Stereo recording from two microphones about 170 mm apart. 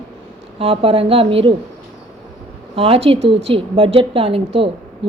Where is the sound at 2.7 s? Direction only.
35° right (ahead or behind).